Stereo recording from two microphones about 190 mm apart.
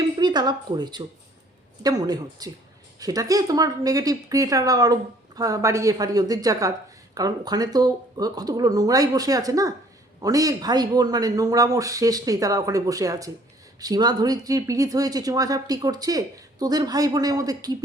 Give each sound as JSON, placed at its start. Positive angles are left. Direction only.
{"t": 0.2, "sound": "speech", "side_deg": -20}